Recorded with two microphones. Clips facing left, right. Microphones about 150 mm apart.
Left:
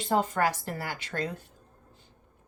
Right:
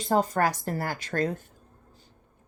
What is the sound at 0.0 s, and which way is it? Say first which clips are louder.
Speech: right 2 dB; 40° right (ahead or behind).